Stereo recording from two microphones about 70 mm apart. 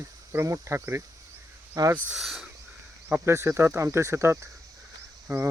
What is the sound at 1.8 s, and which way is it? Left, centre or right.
Speech, right.